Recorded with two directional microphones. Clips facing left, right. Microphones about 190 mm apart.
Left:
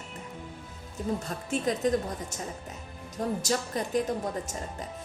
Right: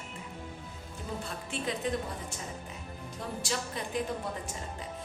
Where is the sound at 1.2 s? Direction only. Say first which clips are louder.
Left 6 dB; 45° left (ahead or behind).